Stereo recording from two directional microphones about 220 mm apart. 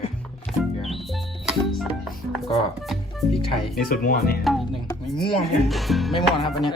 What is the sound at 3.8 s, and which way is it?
Speech, 40° left (ahead or behind).